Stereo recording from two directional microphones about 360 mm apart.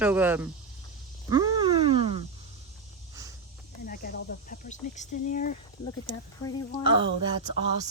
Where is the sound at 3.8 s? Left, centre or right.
Left.